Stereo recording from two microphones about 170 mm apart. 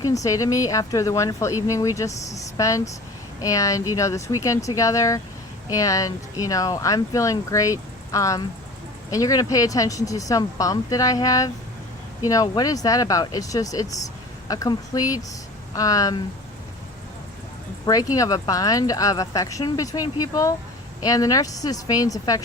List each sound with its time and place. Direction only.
0.0 s speech: 20° left (ahead or behind)
17.8 s speech: 20° left (ahead or behind)